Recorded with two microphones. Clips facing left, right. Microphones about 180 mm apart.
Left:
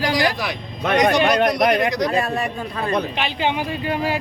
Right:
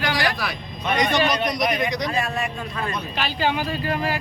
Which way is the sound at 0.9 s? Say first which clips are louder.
Left 4 dB; 80° left.